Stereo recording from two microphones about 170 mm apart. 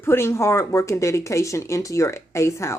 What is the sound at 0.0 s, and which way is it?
Speech, 15° left (ahead or behind).